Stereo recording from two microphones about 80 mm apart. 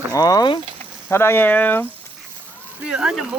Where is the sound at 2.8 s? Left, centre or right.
Centre.